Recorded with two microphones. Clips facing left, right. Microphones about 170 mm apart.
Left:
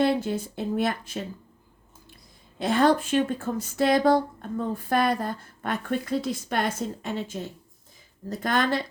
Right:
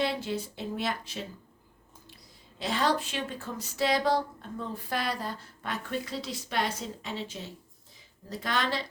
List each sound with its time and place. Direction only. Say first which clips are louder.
0.0 s speech: left 7 dB; 50° left (ahead or behind)
2.6 s speech: left 7 dB; 50° left (ahead or behind)